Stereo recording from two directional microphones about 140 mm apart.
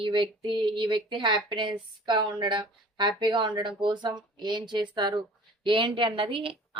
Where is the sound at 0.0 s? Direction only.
35° right (ahead or behind).